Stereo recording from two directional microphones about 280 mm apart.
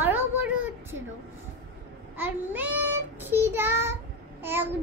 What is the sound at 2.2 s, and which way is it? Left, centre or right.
Child singing, centre.